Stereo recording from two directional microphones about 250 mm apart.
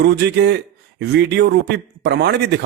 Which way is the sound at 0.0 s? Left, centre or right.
Right.